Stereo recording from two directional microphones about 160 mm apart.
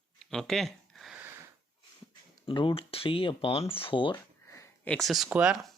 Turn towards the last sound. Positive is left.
turn(degrees=-5)  # may be behind; listen again after turning